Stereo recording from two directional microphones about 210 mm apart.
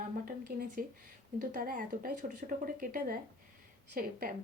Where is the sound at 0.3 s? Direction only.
45° right (ahead or behind).